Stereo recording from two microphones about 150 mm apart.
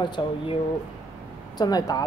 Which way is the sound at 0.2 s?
30° left (ahead or behind).